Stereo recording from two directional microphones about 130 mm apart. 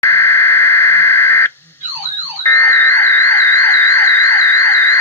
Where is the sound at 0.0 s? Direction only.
20° left (ahead or behind).